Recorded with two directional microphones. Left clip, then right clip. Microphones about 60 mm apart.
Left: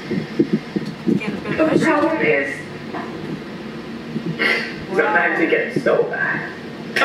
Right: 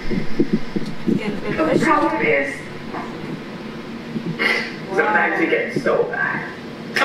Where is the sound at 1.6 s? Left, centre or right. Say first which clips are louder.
Even; centre.